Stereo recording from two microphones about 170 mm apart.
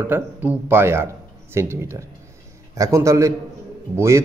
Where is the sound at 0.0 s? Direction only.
10° right (ahead or behind).